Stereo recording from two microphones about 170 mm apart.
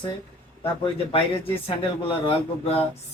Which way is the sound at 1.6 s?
30° left (ahead or behind).